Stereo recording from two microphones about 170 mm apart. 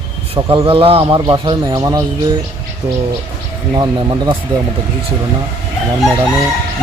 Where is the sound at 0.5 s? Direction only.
30° right (ahead or behind).